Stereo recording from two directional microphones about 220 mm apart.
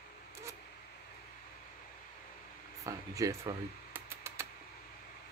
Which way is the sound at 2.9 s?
15° right (ahead or behind).